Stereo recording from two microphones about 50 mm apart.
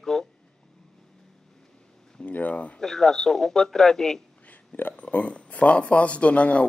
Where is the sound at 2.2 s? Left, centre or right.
Left.